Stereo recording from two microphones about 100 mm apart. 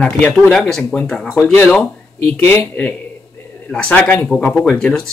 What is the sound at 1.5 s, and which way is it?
Speech, 15° left (ahead or behind).